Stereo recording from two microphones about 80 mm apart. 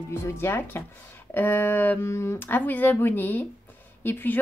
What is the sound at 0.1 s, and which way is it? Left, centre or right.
A woman's voice, left.